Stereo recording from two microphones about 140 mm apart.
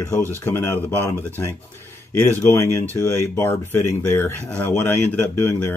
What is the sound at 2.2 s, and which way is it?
Speech, 20° left (ahead or behind).